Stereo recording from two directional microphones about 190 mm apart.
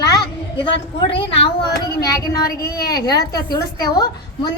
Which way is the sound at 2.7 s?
55° left (ahead or behind).